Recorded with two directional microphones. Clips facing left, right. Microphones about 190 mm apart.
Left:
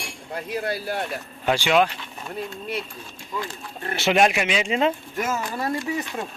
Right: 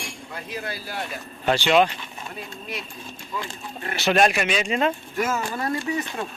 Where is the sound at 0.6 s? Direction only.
55° left (ahead or behind).